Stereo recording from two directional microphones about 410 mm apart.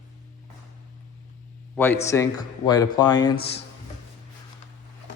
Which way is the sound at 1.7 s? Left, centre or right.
Centre.